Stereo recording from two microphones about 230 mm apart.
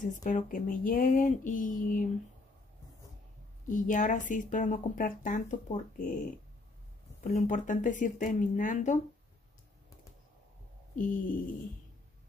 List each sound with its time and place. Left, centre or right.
0.0 s speech: left
3.6 s speech: left
7.2 s speech: left
11.0 s speech: left